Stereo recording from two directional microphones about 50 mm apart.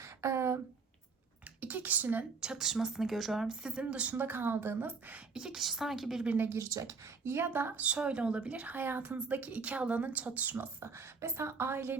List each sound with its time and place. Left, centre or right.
0.0 s a sound: right
1.6 s speech: right
2.4 s speech: centre
4.1 s a woman's voice: right
5.3 s a woman's voice: centre
5.5 s a woman's voice: centre
7.3 s a woman's voice: right
7.8 s speech: right
8.6 s a woman's voice: right
10.8 s a woman's voice: right